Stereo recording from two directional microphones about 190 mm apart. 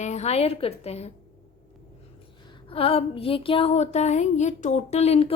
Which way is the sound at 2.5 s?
30° left (ahead or behind).